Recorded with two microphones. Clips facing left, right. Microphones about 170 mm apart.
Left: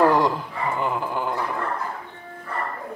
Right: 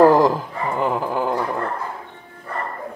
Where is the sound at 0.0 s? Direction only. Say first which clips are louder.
Right 5 dB; 40° right (ahead or behind).